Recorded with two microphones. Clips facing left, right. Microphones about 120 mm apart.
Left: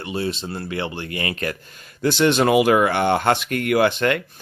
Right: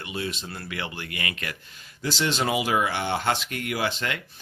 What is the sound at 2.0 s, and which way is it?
Speech, 60° left (ahead or behind).